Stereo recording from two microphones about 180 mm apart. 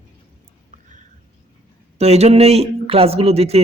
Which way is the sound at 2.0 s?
35° right (ahead or behind).